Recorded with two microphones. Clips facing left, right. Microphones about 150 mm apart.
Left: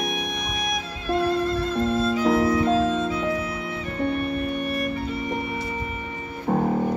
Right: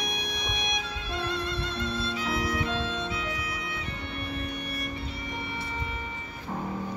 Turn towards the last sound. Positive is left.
turn(degrees=55)  # may be behind; listen again after turning